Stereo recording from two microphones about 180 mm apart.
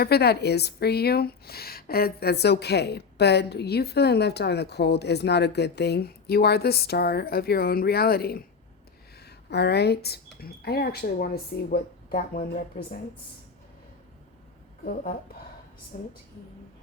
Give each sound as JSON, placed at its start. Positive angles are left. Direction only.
{"t": 0.0, "sound": "a woman's voice", "side_deg": 60}
{"t": 14.8, "sound": "speech", "side_deg": 50}